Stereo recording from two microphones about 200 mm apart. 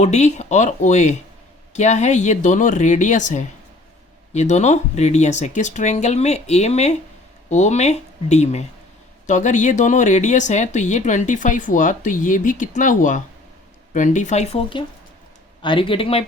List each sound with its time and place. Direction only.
0.0 s speech: 35° left (ahead or behind)